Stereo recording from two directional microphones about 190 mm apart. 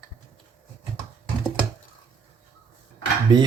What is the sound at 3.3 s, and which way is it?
Cutlery, 25° right (ahead or behind).